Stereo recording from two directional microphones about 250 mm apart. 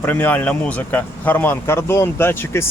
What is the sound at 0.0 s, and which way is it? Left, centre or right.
Speech, centre.